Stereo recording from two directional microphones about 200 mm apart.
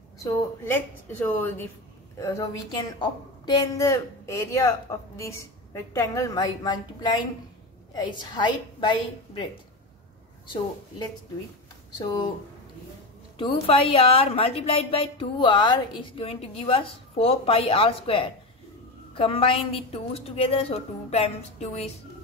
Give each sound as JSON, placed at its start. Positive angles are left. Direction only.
{"t": 0.2, "sound": "a woman's voice", "side_deg": 10}
{"t": 13.4, "sound": "a woman's voice", "side_deg": 25}